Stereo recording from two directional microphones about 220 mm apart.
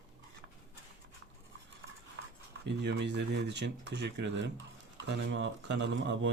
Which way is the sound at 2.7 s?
50° right (ahead or behind).